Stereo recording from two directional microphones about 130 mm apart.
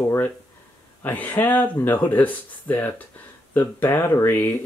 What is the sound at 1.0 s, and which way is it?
Speech, 15° left (ahead or behind).